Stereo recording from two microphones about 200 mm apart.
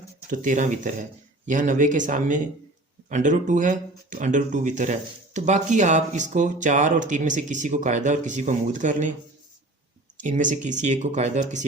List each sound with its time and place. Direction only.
0.3 s speech: 40° right (ahead or behind)
10.2 s speech: 40° right (ahead or behind)